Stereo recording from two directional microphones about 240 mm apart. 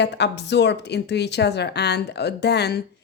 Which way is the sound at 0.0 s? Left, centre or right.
Left.